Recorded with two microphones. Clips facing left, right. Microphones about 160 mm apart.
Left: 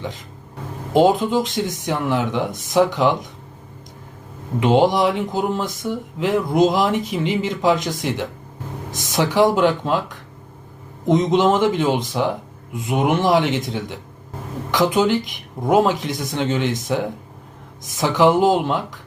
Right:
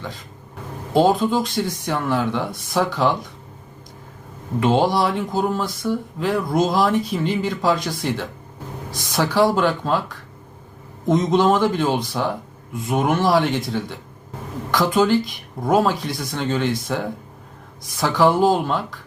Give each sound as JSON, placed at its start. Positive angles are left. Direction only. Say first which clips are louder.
{"t": 0.9, "sound": "speech", "louder": "left 1 dB", "side_deg": 20}
{"t": 4.6, "sound": "speech", "louder": "left 2 dB", "side_deg": 15}